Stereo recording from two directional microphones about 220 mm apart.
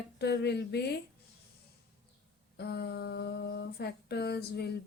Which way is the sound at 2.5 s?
50° left (ahead or behind).